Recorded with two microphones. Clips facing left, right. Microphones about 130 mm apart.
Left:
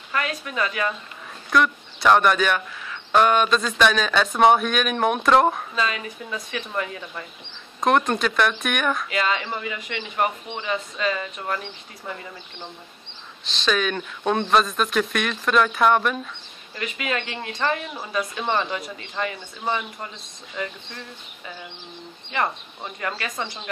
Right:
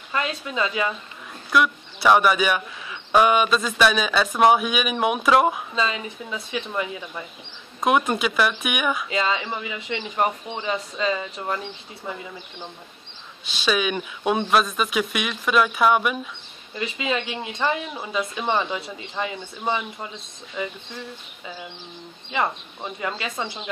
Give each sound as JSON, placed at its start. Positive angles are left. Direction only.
{"t": 0.1, "sound": "speech", "side_deg": -20}
{"t": 1.5, "sound": "speech", "side_deg": -5}
{"t": 5.8, "sound": "speech", "side_deg": -20}
{"t": 6.7, "sound": "speech", "side_deg": -10}
{"t": 9.1, "sound": "speech", "side_deg": -20}
{"t": 9.8, "sound": "speech", "side_deg": -25}
{"t": 22.9, "sound": "speech", "side_deg": -15}